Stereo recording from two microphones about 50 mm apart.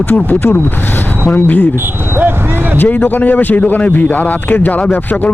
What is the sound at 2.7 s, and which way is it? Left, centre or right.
A man's voice, left.